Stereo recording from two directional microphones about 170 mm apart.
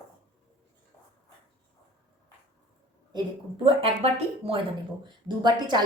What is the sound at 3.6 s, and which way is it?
A woman's voice, 30° right (ahead or behind).